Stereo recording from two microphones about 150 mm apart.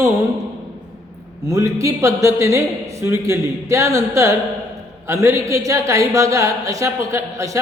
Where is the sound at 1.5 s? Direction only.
20° right (ahead or behind).